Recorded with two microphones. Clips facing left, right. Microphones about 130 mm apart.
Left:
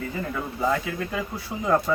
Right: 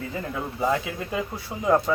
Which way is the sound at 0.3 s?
15° right (ahead or behind).